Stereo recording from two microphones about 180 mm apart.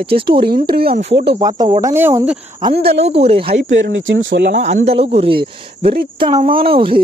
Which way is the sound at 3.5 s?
90° right.